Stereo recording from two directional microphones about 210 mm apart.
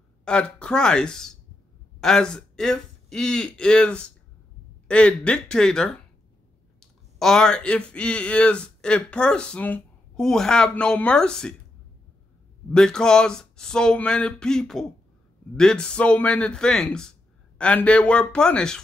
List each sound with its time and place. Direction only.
0.2 s a man's voice: 5° left (ahead or behind)
12.7 s speech: 5° left (ahead or behind)